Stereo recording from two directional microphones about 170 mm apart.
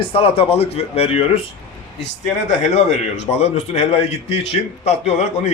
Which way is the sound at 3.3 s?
40° left (ahead or behind).